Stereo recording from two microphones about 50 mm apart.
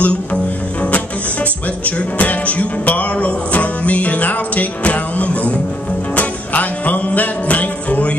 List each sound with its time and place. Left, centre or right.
0.0 s music: left
1.9 s music: left